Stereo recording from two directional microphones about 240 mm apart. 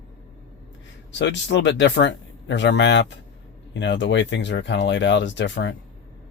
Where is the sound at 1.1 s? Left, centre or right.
Left.